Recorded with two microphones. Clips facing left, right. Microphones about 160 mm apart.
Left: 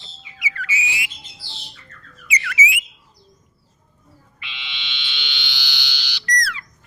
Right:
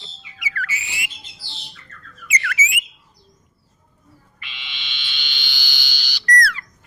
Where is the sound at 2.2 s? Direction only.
50° right (ahead or behind).